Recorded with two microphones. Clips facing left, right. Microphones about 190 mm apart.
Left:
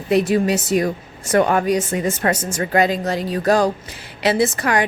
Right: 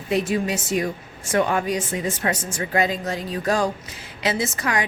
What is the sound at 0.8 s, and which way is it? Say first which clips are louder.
Speech: left 5 dB; 40° left (ahead or behind).